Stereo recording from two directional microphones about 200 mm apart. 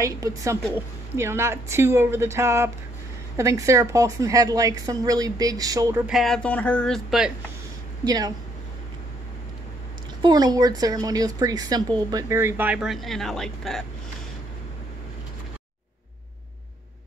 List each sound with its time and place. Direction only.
0.0 s speech: 15° right (ahead or behind)
6.0 s speech: centre (ahead or behind)
8.0 s speech: 20° right (ahead or behind)
10.2 s speech: 20° right (ahead or behind); by 13.8 s centre (ahead or behind)